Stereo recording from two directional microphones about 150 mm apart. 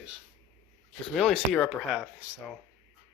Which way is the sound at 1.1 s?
Centre (ahead or behind).